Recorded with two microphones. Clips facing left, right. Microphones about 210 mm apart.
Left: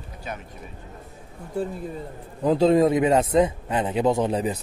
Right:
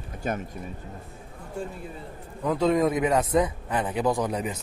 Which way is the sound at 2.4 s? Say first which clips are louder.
Left 5 dB; 30° left (ahead or behind).